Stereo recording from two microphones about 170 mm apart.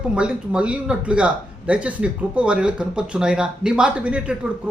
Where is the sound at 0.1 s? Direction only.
5° right (ahead or behind).